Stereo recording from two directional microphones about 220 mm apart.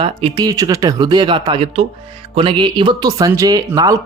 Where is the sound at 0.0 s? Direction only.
20° right (ahead or behind).